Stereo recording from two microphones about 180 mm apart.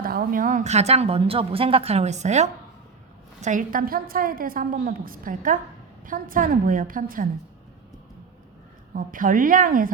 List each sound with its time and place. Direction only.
0.0 s a woman's voice: 55° right (ahead or behind)
9.0 s a woman's voice: 50° right (ahead or behind)